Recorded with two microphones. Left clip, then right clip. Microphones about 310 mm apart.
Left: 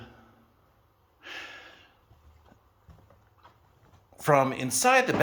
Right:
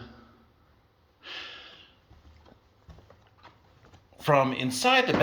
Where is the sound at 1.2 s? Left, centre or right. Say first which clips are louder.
Right 1 dB; centre.